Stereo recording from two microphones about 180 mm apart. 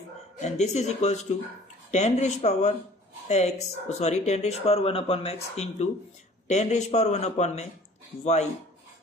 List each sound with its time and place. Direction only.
0.4 s speech: 40° left (ahead or behind)